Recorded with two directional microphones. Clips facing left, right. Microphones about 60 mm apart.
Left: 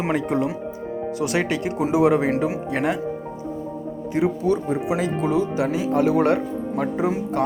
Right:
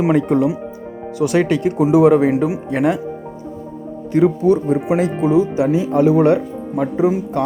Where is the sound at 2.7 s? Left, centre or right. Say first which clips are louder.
Right 7 dB; centre.